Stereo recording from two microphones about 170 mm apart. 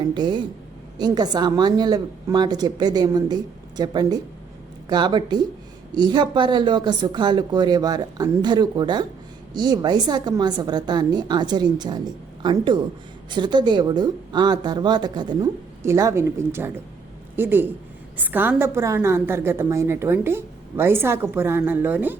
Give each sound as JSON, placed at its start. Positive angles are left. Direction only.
{"t": 0.0, "sound": "a woman's voice", "side_deg": -25}